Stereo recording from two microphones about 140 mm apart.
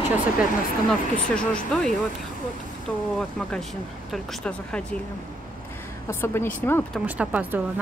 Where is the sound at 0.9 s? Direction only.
5° left (ahead or behind).